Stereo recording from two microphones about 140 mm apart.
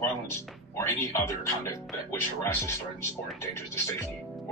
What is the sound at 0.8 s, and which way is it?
Speech, 20° left (ahead or behind).